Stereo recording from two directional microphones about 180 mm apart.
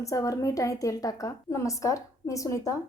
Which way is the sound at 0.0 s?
20° left (ahead or behind).